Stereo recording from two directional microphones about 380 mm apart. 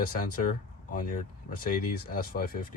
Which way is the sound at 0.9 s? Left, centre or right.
Left.